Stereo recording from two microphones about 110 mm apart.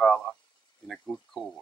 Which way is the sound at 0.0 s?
5° left (ahead or behind).